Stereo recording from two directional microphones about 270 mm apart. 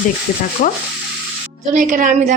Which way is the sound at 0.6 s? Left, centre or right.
Left.